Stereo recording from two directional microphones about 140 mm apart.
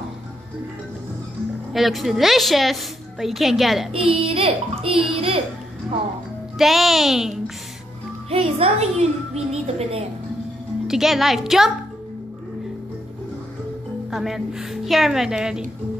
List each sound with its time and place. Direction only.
1.7 s a woman's voice: centre (ahead or behind)
3.9 s a child's voice: 40° right (ahead or behind)
6.6 s a woman's voice: centre (ahead or behind)
8.3 s a child's voice: 45° right (ahead or behind)
10.9 s a woman's voice: centre (ahead or behind)
14.1 s a woman's voice: centre (ahead or behind)